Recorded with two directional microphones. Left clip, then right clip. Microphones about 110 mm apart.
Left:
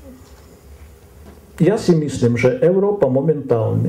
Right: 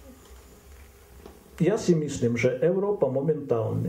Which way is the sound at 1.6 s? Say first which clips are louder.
Left 8 dB; 15° left (ahead or behind).